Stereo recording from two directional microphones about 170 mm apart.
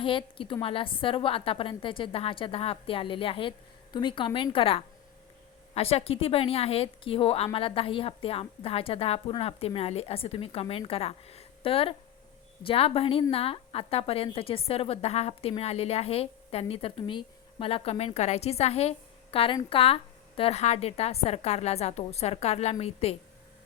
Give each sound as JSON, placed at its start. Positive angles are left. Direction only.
{"t": 0.0, "sound": "a woman's voice", "side_deg": 30}